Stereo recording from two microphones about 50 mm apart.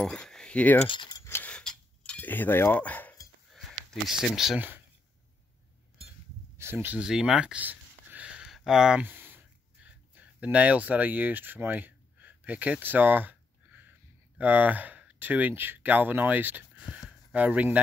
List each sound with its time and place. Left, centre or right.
0.0 s keys jangling: centre
0.7 s speech: left
1.5 s tick-tock: centre
2.1 s speech: left
3.5 s sniff: centre
4.6 s speech: right
6.6 s speech: right
7.0 s speech: centre
7.6 s a sound: right
8.5 s speech: centre
9.0 s a sound: right
9.8 s a sound: right
14.4 s speech: right
17.3 s speech: right